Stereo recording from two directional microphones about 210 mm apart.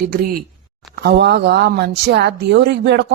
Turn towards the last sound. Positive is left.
turn(degrees=-55)  # may be behind; listen again after turning